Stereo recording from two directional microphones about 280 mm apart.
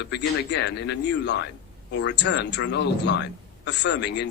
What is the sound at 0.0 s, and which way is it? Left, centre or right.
Speech, left.